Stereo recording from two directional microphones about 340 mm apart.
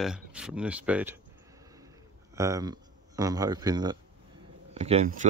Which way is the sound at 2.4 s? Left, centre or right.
Centre.